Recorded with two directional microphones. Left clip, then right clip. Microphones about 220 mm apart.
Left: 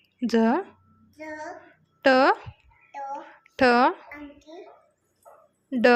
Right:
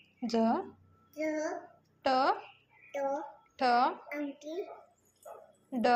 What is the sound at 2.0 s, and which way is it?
Speech, 40° left (ahead or behind).